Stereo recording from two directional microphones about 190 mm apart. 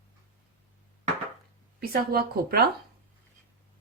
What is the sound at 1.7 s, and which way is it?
Speech, 55° right (ahead or behind).